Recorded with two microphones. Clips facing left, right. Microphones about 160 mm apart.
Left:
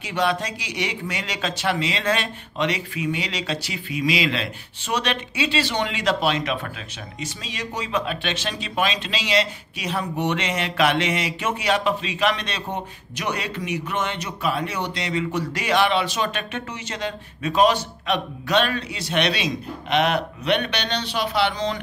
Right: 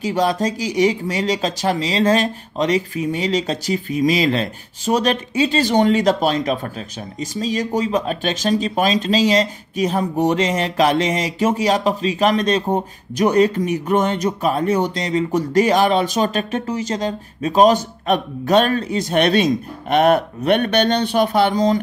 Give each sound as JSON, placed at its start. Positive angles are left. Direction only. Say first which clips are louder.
{"t": 0.0, "sound": "speech", "louder": "right 5 dB", "side_deg": -40}